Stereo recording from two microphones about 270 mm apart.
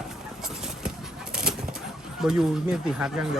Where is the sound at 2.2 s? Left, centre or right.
Centre.